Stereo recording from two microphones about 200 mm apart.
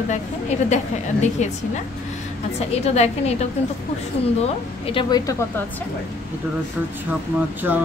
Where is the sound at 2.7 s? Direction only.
30° left (ahead or behind).